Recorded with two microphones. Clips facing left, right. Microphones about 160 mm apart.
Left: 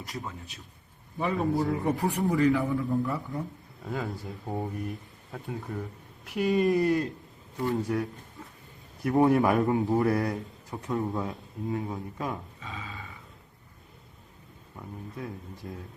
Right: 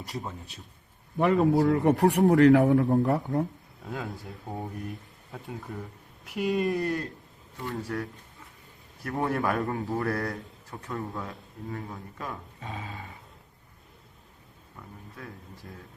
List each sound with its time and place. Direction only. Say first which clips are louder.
1.2 s a man's voice: right 5 dB; 65° right (ahead or behind)
3.8 s speech: left 2 dB; centre (ahead or behind)
7.7 s speech: left 4 dB; 20° left (ahead or behind)
9.0 s speech: left 6 dB; 15° left (ahead or behind)
12.5 s dog: right 2 dB; 45° right (ahead or behind)